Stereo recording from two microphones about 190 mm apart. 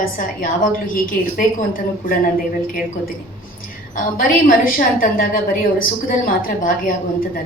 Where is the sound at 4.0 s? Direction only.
45° left (ahead or behind).